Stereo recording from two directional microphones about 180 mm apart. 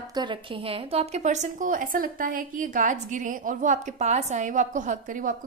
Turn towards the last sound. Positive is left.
turn(degrees=-45)  # may be behind; listen again after turning